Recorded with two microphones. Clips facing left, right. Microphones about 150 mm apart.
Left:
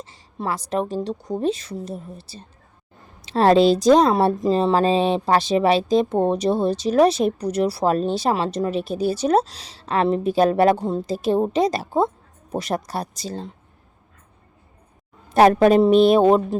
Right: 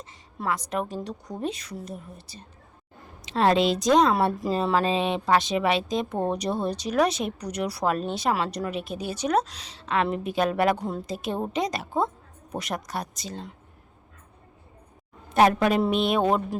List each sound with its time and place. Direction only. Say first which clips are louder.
0.0 s speech: left 3 dB; 30° left (ahead or behind)
15.3 s speech: left 6 dB; 35° left (ahead or behind)